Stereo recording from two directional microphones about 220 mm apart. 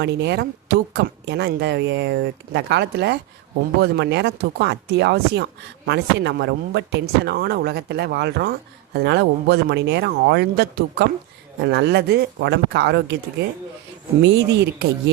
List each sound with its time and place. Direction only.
0.0 s speech: 50° right (ahead or behind)
14.2 s speech: 50° right (ahead or behind)